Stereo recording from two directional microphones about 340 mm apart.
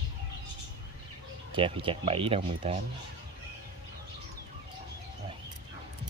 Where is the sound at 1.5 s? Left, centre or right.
Centre.